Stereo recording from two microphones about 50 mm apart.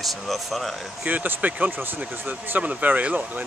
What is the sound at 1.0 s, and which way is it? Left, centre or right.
Speech, right.